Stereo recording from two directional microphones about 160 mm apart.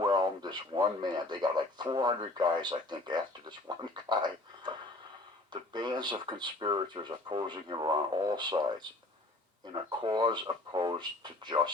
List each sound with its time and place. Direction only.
0.0 s speech: 25° right (ahead or behind)
9.6 s speech: 25° right (ahead or behind)